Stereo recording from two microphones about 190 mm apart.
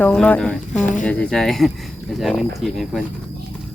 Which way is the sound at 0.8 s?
40° left (ahead or behind).